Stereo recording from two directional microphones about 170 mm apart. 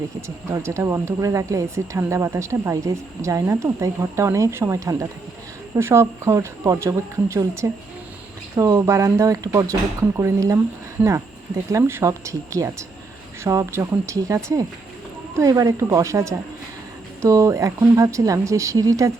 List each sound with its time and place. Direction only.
0.2 s speech: 15° right (ahead or behind)